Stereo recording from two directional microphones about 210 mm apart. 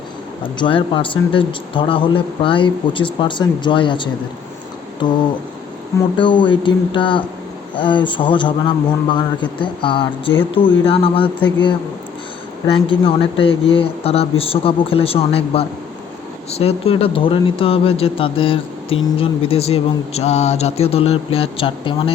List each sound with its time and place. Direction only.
0.6 s speech: 25° left (ahead or behind)
12.7 s speech: 25° left (ahead or behind)